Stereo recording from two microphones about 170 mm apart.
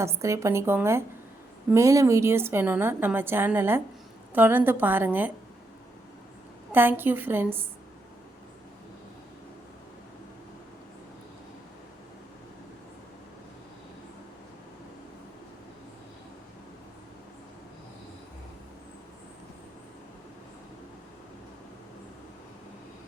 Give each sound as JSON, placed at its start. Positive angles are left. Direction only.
{"t": 0.0, "sound": "a woman's voice", "side_deg": -15}
{"t": 6.7, "sound": "a woman's voice", "side_deg": -10}